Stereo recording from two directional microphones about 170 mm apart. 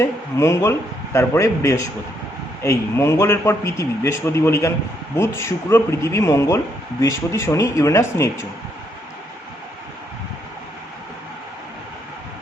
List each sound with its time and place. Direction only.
0.0 s a man's voice: 15° left (ahead or behind)